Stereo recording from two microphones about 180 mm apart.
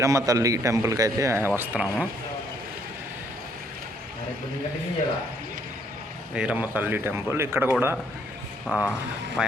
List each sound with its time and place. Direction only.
0.0 s a man's voice: 15° right (ahead or behind)
6.3 s a man's voice: 5° right (ahead or behind)
8.6 s speech: 5° left (ahead or behind)